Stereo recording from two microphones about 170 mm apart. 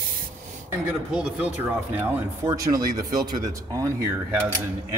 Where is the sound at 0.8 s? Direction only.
5° right (ahead or behind).